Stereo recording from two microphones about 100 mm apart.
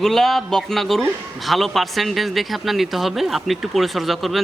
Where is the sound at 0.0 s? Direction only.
Centre (ahead or behind).